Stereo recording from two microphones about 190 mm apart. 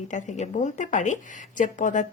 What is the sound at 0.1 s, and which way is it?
A woman's voice, 40° left (ahead or behind).